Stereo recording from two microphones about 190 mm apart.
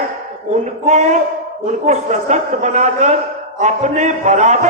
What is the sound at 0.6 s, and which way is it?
A man's voice, 40° right (ahead or behind).